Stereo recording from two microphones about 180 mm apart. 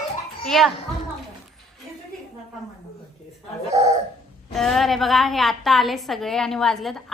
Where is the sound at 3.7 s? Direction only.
40° right (ahead or behind).